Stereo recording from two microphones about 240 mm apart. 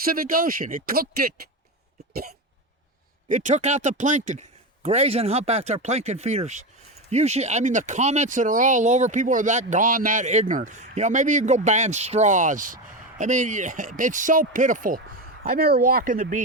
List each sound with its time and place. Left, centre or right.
0.0 s speech: right
3.2 s a man's voice: right